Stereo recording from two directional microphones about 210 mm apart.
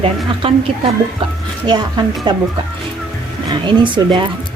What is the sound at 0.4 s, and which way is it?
Speech, 25° right (ahead or behind).